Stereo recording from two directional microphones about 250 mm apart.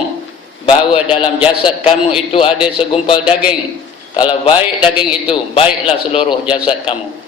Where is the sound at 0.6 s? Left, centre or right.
Left.